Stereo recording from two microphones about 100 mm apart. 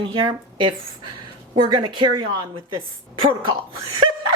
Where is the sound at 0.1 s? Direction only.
55° right (ahead or behind).